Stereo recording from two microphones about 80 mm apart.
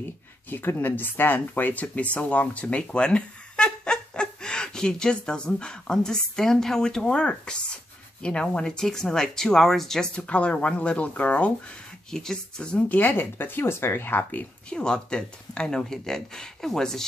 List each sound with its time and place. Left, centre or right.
0.5 s speech: left
12.1 s speech: centre